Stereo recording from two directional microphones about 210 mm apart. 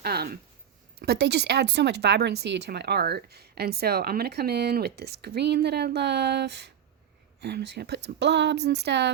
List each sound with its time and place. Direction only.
0.0 s speech: 50° right (ahead or behind)